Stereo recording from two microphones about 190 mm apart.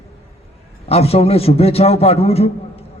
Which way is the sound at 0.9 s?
30° left (ahead or behind).